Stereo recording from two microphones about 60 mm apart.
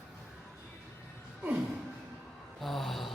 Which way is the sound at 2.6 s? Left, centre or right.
Centre.